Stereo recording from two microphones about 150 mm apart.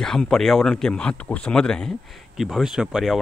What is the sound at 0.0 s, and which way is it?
Speech, 5° left (ahead or behind).